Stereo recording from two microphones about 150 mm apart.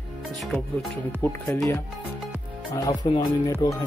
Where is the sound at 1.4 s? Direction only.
20° left (ahead or behind).